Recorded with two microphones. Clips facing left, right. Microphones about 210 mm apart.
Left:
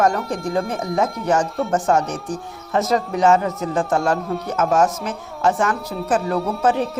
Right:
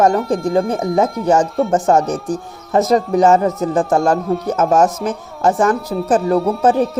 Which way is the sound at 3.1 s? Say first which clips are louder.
Right 4 dB; 40° right (ahead or behind).